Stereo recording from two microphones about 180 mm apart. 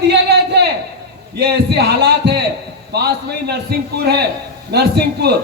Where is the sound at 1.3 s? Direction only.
65° right (ahead or behind).